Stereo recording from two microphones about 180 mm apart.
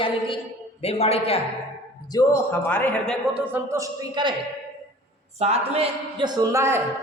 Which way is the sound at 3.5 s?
15° right (ahead or behind).